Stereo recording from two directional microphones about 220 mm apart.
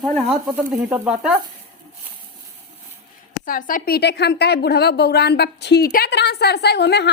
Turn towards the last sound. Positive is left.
turn(degrees=50)  # may be behind; listen again after turning